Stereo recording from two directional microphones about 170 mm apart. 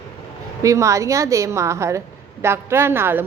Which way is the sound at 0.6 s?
20° right (ahead or behind).